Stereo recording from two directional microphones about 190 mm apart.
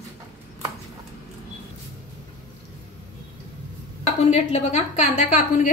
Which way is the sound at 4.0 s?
35° left (ahead or behind).